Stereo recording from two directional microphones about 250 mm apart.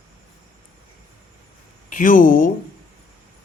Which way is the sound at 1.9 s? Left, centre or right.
Left.